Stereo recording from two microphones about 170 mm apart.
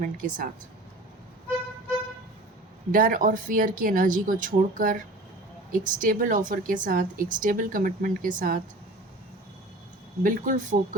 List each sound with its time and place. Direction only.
0.0 s a woman's voice: 50° right (ahead or behind)
2.9 s a woman's voice: 50° right (ahead or behind)
10.2 s a woman's voice: 55° right (ahead or behind)